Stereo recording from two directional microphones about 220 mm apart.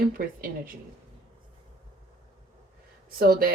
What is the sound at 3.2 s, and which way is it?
Speech, 40° right (ahead or behind).